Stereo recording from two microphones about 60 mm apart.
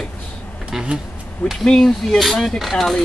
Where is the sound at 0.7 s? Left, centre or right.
Centre.